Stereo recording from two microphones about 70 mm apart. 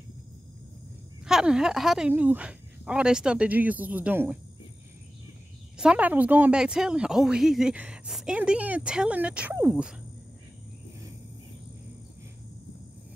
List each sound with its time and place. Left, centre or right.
1.2 s speech: centre
2.0 s speech: right
5.8 s speech: centre
6.5 s speech: centre
8.4 s speech: centre